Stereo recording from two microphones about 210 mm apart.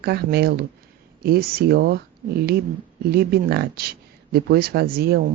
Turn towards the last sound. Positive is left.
turn(degrees=-50)  # may be behind; listen again after turning